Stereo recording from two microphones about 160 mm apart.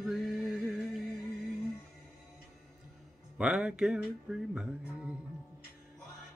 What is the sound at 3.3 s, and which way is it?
Male singing, 5° right (ahead or behind).